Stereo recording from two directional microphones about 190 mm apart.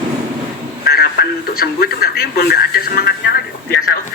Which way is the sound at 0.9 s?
55° left (ahead or behind).